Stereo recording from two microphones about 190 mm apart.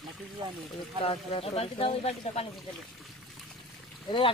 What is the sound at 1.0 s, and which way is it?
Speech, 30° left (ahead or behind).